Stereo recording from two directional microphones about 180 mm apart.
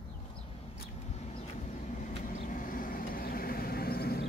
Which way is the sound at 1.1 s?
35° left (ahead or behind).